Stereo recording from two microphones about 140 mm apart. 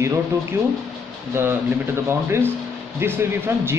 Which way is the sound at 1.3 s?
15° right (ahead or behind).